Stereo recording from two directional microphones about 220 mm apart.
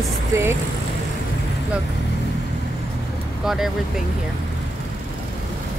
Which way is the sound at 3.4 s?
Centre (ahead or behind).